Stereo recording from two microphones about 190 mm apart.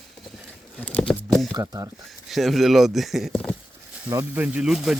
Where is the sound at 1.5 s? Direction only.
20° right (ahead or behind).